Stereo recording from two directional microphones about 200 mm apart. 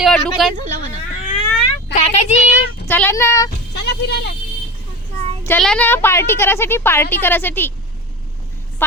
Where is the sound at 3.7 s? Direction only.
55° left (ahead or behind).